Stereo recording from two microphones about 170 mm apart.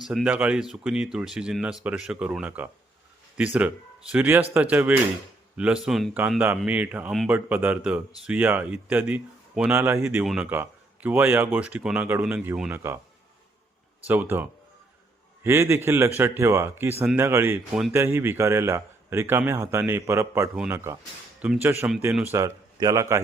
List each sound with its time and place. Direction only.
0.0 s speech: centre (ahead or behind)
14.1 s speech: 10° right (ahead or behind)